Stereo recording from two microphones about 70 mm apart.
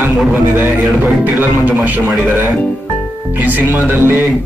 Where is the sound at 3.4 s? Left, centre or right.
Right.